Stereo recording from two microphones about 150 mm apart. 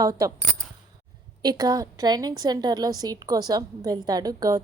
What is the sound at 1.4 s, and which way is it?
A woman's voice, 25° right (ahead or behind).